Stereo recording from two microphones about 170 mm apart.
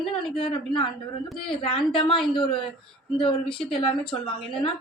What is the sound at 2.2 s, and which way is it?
Speech, 5° left (ahead or behind).